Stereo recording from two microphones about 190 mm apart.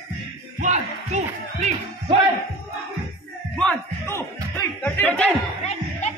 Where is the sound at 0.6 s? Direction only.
40° right (ahead or behind).